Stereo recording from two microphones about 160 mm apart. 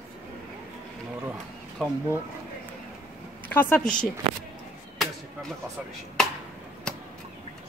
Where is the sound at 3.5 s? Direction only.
10° left (ahead or behind).